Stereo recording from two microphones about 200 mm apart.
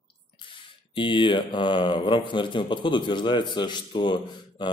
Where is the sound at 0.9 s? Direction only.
25° left (ahead or behind).